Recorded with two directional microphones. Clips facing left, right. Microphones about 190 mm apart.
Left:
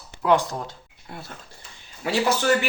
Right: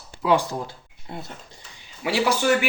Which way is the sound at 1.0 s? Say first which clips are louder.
Right 3 dB; 20° right (ahead or behind).